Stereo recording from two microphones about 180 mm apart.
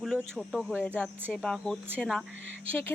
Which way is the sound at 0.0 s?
Centre (ahead or behind).